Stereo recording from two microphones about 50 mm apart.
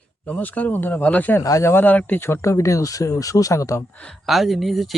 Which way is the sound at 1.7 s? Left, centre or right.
Left.